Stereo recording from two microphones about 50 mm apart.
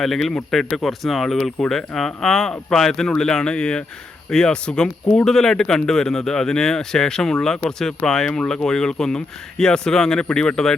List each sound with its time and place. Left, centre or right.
0.0 s speech: centre